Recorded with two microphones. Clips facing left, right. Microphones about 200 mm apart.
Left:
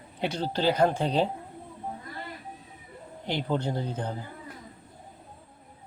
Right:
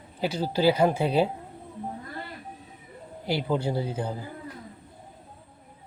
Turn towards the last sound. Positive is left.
turn(degrees=-10)  # may be behind; listen again after turning